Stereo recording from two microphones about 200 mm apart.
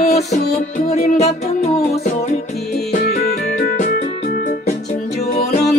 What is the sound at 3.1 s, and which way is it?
Music, 50° left (ahead or behind).